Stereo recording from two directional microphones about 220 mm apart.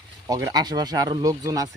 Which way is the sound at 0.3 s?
15° right (ahead or behind).